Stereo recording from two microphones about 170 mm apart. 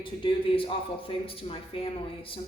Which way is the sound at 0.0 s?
30° left (ahead or behind).